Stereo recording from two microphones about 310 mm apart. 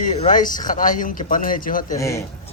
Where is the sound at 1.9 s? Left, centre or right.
Centre.